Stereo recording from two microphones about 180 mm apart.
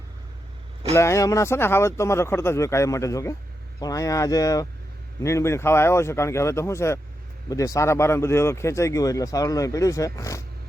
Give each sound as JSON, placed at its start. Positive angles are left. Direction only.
{"t": 0.9, "sound": "speech", "side_deg": 15}